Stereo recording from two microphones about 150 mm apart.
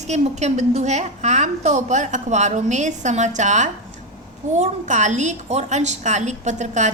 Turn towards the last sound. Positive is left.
turn(degrees=-55)  # may be behind; listen again after turning